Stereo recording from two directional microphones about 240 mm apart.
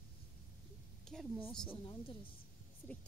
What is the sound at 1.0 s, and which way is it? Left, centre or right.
Speech, centre.